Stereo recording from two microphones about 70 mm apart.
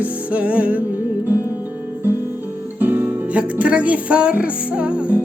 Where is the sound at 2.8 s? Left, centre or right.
Right.